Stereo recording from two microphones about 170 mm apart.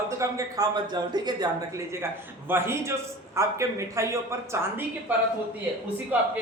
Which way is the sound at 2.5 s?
15° right (ahead or behind).